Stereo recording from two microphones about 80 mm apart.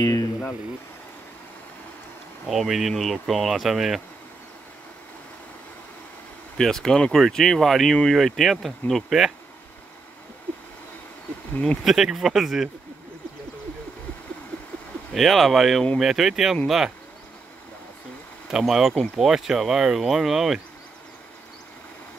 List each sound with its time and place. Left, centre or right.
0.0 s a sound: left
2.4 s speech: centre
6.6 s speech: centre
11.5 s speech: centre
11.8 s speech: centre
15.1 s speech: centre
18.5 s speech: centre